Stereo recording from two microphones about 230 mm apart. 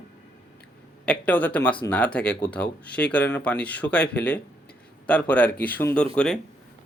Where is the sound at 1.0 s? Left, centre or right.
Centre.